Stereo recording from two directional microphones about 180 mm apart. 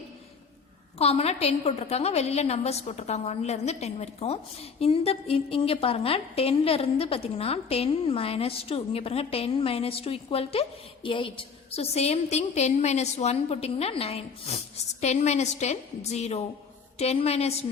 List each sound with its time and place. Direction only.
0.9 s a woman's voice: 35° left (ahead or behind)